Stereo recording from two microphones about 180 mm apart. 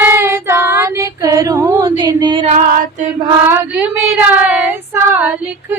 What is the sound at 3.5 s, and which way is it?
Female singing, 10° right (ahead or behind).